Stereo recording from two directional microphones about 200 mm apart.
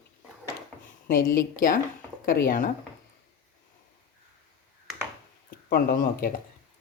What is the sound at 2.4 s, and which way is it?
Speech, 40° left (ahead or behind).